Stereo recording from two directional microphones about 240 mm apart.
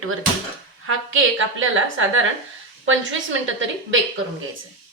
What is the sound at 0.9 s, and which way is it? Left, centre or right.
A woman's voice, right.